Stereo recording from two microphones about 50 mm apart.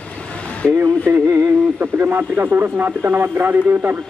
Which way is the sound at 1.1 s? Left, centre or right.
Right.